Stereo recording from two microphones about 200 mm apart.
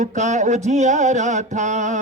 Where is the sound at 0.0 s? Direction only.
35° right (ahead or behind).